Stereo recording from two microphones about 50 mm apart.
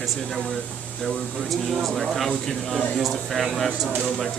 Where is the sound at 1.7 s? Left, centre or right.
Centre.